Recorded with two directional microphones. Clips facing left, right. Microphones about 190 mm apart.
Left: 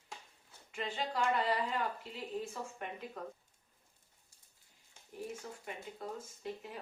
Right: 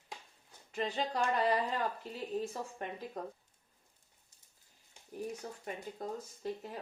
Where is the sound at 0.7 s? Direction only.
40° right (ahead or behind).